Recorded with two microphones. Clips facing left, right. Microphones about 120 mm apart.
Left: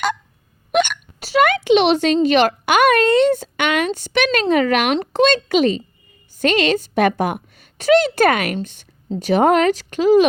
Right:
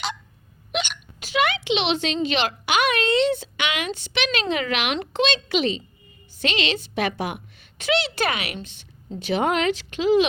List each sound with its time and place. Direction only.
0.7 s hiccup: 50° left (ahead or behind)
1.2 s a woman's voice: 40° left (ahead or behind)